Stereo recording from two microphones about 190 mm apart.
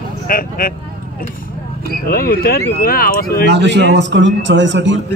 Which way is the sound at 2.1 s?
50° left (ahead or behind).